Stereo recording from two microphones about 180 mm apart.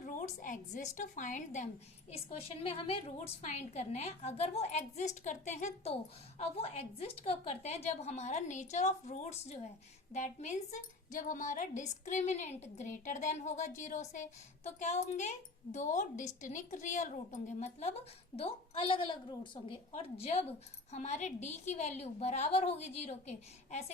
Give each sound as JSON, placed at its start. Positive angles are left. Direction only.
{"t": 0.0, "sound": "a woman's voice", "side_deg": 45}